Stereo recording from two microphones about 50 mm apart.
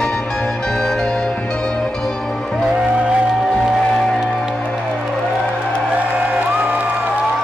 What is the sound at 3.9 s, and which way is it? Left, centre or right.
Music, centre.